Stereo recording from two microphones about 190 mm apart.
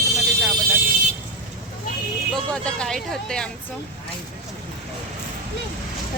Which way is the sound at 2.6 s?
5° left (ahead or behind).